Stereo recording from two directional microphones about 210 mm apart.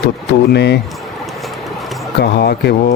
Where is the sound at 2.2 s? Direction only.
50° left (ahead or behind).